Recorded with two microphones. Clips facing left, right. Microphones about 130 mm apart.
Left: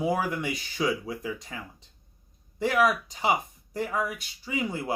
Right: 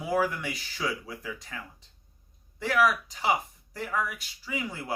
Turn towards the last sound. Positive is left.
turn(degrees=20)  # may be behind; listen again after turning